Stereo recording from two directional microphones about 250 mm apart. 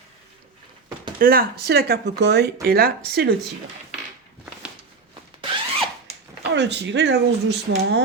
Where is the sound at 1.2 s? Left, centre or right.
Right.